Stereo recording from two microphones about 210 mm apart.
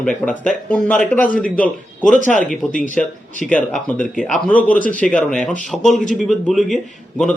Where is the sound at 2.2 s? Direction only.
35° left (ahead or behind).